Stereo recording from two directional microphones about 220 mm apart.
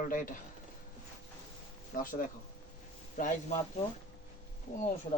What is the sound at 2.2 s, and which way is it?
Speech, 40° left (ahead or behind).